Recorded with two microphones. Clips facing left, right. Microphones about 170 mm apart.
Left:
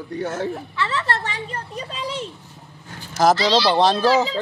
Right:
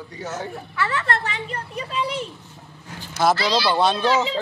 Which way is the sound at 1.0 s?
35° left (ahead or behind).